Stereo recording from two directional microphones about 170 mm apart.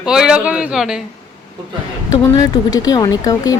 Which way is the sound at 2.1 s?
20° left (ahead or behind).